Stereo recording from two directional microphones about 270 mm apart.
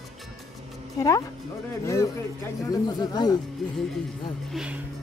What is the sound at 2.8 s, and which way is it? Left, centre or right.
Speech, centre.